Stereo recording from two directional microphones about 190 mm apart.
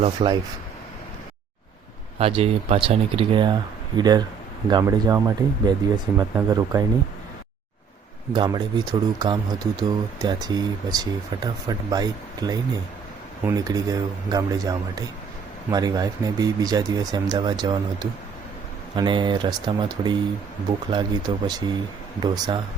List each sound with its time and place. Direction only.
0.2 s speech: 30° right (ahead or behind)
2.1 s speech: 30° right (ahead or behind)
8.3 s speech: 20° right (ahead or behind)